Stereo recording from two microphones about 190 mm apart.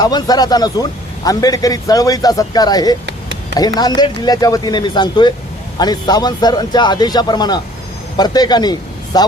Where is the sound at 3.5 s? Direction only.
20° left (ahead or behind).